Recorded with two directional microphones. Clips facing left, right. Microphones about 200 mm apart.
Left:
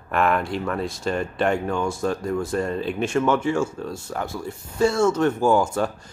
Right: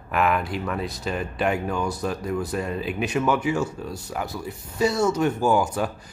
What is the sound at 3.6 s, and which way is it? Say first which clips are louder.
Speech: left 2 dB; 25° left (ahead or behind).